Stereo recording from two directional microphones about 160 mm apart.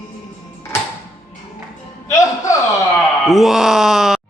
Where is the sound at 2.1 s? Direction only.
20° left (ahead or behind).